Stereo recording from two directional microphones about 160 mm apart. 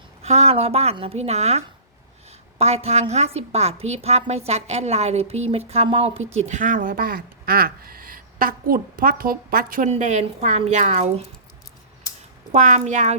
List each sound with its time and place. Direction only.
0.2 s a woman's voice: 40° right (ahead or behind); by 9.9 s 60° right (ahead or behind)
9.9 s a woman's voice: 45° right (ahead or behind)
12.5 s a woman's voice: 50° right (ahead or behind)